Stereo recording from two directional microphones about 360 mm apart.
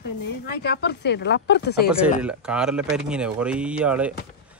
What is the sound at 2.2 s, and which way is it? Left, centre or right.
Speech, centre.